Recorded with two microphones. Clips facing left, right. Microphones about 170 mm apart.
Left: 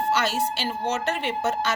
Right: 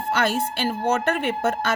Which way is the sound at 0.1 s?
55° right (ahead or behind).